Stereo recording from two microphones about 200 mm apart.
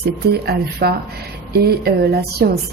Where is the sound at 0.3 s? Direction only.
55° right (ahead or behind).